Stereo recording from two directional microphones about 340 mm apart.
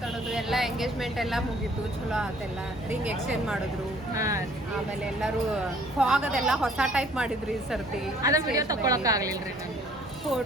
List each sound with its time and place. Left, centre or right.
0.3 s a woman's voice: centre
4.2 s a woman's voice: centre
6.0 s a woman's voice: centre